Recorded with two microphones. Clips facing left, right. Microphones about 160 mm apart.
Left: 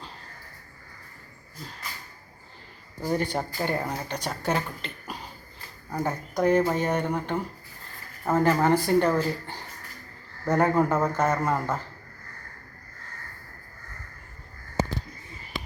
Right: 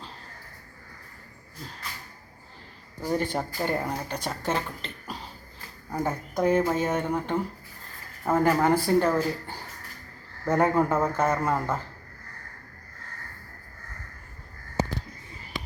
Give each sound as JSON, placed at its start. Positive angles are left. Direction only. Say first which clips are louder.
{"t": 3.0, "sound": "speech", "louder": "even", "side_deg": 0}